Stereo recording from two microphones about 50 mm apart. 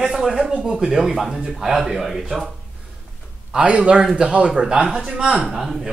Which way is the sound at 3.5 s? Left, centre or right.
Right.